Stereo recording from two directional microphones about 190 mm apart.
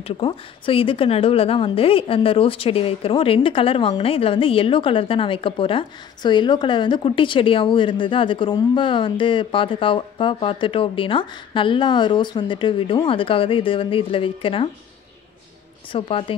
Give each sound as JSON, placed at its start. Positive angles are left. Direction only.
{"t": 0.0, "sound": "speech", "side_deg": 30}
{"t": 15.9, "sound": "speech", "side_deg": 30}